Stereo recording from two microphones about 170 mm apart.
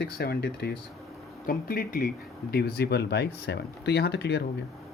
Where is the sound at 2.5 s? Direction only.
70° left (ahead or behind).